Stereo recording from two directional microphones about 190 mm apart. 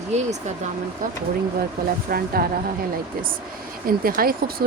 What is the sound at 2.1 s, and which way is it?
Speech, 50° right (ahead or behind).